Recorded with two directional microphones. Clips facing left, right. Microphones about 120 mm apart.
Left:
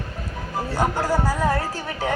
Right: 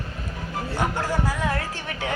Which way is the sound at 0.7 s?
35° left (ahead or behind).